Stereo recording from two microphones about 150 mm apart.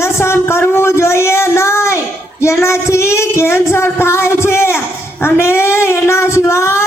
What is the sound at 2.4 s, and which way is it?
Female singing, 20° left (ahead or behind).